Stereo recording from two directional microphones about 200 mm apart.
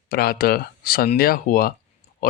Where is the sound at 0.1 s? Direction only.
50° left (ahead or behind).